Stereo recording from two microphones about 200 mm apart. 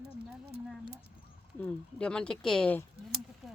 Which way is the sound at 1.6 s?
5° left (ahead or behind).